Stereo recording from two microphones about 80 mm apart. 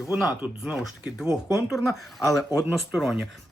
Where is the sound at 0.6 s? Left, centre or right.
Centre.